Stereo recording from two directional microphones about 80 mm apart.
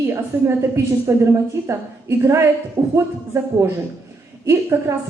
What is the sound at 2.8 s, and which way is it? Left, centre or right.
Speech, right.